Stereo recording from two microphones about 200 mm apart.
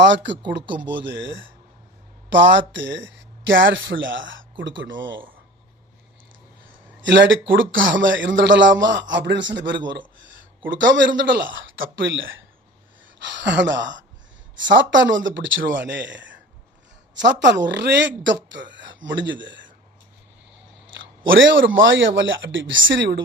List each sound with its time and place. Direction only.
0.0 s a man's voice: 65° right (ahead or behind)
7.0 s a man's voice: 65° right (ahead or behind)
10.9 s a man's voice: 65° right (ahead or behind)
21.2 s speech: 75° right (ahead or behind)